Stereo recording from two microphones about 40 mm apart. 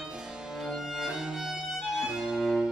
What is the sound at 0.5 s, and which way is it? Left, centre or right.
Music, centre.